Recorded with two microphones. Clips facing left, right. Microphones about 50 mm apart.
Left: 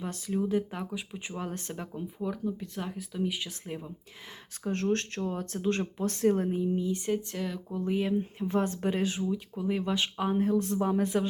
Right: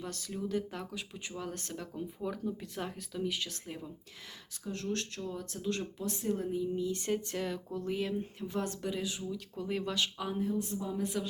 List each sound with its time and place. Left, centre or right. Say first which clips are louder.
0.0 s speech: left 7 dB; left
2.3 s speech: left 4 dB; centre
4.6 s speech: left 8 dB; left
6.1 s speech: left 7 dB; left
6.7 s speech: left 3 dB; centre
7.1 s speech: left 2 dB; centre
7.8 s speech: left 6 dB; left
8.4 s speech: left 7 dB; left
9.3 s speech: left 5 dB; centre
9.9 s speech: left 5 dB; left
10.5 s speech: left 8 dB; left
11.0 s speech: left 7 dB; left